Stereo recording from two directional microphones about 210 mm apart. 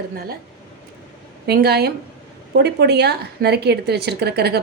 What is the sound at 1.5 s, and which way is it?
Speech, 50° right (ahead or behind).